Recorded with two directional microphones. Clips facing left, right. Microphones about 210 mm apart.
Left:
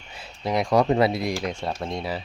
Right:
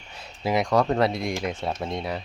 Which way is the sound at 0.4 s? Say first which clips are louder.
Right 1 dB; centre (ahead or behind).